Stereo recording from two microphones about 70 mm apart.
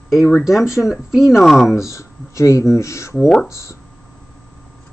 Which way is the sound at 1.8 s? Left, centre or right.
Left.